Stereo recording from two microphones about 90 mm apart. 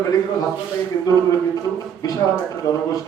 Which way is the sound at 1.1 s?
40° left (ahead or behind).